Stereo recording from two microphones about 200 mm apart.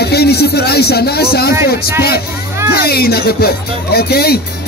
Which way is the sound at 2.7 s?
50° left (ahead or behind).